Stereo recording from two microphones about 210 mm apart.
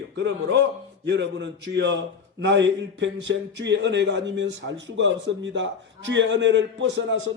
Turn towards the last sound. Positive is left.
turn(degrees=-60)  # may be behind; listen again after turning